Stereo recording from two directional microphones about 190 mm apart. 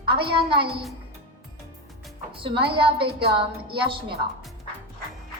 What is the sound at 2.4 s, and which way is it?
A woman's voice, 25° right (ahead or behind).